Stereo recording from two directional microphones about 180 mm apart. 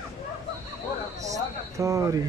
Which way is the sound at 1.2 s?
20° right (ahead or behind).